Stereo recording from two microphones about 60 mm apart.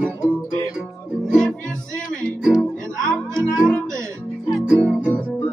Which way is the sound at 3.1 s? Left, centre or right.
Centre.